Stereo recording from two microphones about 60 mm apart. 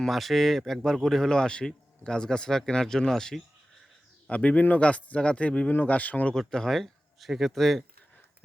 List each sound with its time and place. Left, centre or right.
0.0 s speech: centre
4.3 s speech: left
6.3 s speech: centre